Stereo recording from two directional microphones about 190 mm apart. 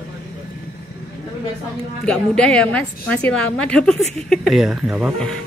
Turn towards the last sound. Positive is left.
turn(degrees=0)  # may be behind; listen again after turning